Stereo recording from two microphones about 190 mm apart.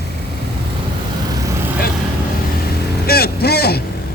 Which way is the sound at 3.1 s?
55° left (ahead or behind).